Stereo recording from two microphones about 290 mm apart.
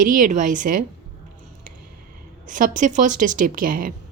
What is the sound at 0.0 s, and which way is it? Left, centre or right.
Speech, right.